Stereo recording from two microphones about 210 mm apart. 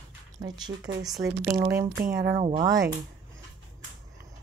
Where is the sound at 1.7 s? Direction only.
15° right (ahead or behind).